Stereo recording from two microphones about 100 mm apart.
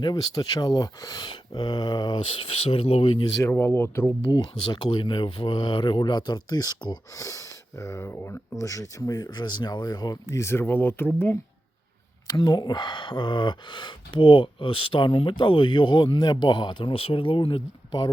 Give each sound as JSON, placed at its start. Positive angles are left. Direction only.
{"t": 0.0, "sound": "speech", "side_deg": 40}
{"t": 3.4, "sound": "speech", "side_deg": 25}
{"t": 4.3, "sound": "speech", "side_deg": 50}
{"t": 12.3, "sound": "speech", "side_deg": 45}